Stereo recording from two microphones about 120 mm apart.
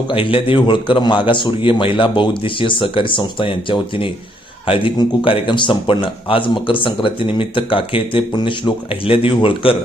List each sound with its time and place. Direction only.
0.1 s speech: 50° left (ahead or behind)